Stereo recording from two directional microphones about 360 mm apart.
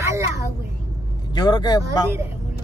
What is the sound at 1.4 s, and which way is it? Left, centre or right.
Speech, centre.